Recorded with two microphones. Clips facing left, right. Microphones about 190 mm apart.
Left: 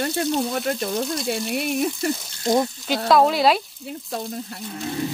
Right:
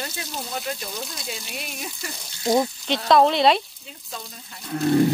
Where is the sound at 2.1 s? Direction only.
Centre (ahead or behind).